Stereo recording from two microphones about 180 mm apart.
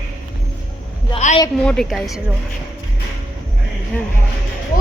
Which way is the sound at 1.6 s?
Centre (ahead or behind).